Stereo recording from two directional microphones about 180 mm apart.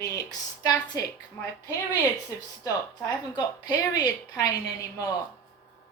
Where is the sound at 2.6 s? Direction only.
20° left (ahead or behind).